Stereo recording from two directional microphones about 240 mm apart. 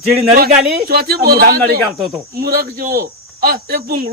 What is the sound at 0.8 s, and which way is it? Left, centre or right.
Speech, right.